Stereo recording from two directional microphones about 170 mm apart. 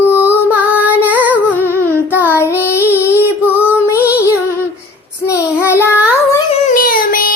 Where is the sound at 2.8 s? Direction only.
10° right (ahead or behind).